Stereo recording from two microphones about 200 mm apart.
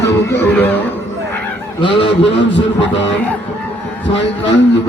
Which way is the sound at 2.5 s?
65° left (ahead or behind).